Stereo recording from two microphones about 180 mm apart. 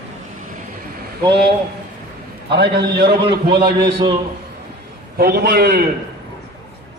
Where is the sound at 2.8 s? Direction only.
60° right (ahead or behind).